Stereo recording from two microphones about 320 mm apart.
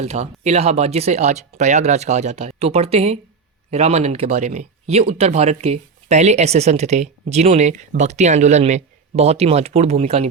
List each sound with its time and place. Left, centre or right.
0.0 s speech: centre